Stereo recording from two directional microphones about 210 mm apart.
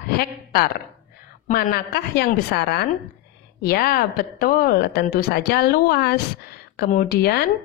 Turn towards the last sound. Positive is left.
turn(degrees=50)  # may be behind; listen again after turning